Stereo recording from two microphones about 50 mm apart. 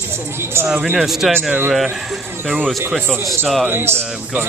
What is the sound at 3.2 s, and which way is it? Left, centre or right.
Speech, centre.